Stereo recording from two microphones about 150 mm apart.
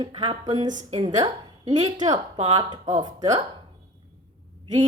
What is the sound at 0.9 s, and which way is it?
A woman's voice, 30° right (ahead or behind).